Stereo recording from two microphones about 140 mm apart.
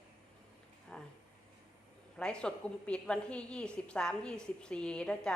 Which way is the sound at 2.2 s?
5° left (ahead or behind).